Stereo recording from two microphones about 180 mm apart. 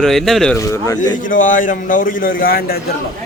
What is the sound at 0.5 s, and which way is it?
Speech, 15° left (ahead or behind).